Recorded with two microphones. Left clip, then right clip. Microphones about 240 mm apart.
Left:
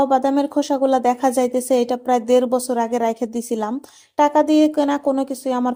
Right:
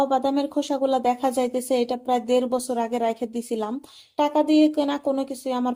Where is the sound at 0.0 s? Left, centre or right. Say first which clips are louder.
Left 5 dB; left.